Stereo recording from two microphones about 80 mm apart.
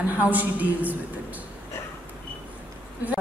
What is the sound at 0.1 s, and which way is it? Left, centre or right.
Speech, right.